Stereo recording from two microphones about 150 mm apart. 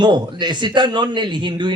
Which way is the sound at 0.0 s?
30° right (ahead or behind).